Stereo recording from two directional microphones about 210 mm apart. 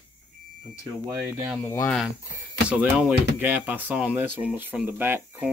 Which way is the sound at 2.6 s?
5° right (ahead or behind).